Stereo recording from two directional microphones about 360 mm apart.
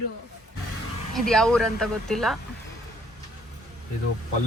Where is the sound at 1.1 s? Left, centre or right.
Centre.